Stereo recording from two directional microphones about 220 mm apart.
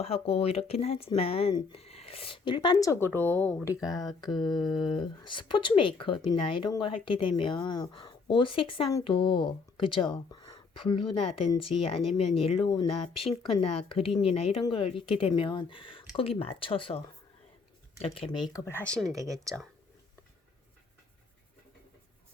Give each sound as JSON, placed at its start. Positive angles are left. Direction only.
{"t": 0.0, "sound": "speech", "side_deg": 25}
{"t": 4.7, "sound": "speech", "side_deg": 20}
{"t": 18.0, "sound": "speech", "side_deg": 25}